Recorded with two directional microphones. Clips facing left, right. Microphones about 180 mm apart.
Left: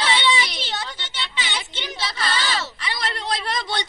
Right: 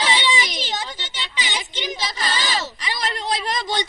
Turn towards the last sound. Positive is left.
turn(degrees=-15)  # may be behind; listen again after turning